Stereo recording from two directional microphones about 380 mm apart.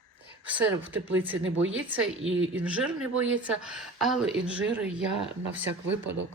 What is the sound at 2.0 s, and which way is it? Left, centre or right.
Speech, right.